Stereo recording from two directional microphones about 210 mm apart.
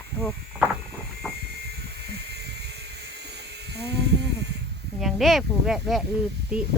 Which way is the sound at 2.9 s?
50° right (ahead or behind).